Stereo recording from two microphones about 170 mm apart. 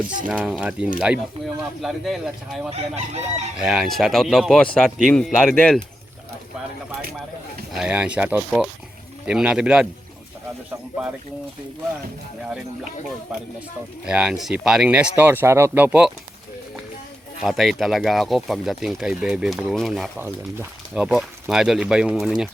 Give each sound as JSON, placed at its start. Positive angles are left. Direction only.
{"t": 0.3, "sound": "speech", "side_deg": -5}
{"t": 2.6, "sound": "chicken", "side_deg": -40}
{"t": 3.6, "sound": "speech", "side_deg": 0}
{"t": 7.7, "sound": "speech", "side_deg": -5}
{"t": 14.0, "sound": "speech", "side_deg": -5}
{"t": 17.4, "sound": "speech", "side_deg": 0}
{"t": 20.1, "sound": "speech", "side_deg": -10}